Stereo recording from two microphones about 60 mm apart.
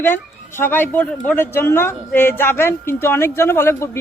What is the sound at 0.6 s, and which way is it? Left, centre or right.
Speech, left.